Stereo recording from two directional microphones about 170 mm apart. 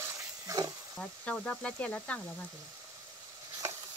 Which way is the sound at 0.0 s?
20° right (ahead or behind).